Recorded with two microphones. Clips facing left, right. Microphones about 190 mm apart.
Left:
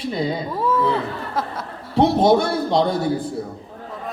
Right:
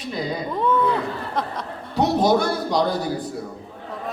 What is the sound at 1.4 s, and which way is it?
Speech, 5° left (ahead or behind).